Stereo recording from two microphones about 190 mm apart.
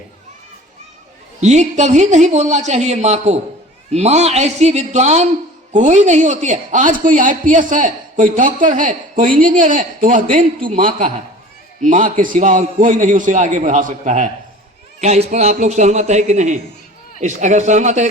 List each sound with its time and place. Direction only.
1.4 s a man's voice: 40° right (ahead or behind)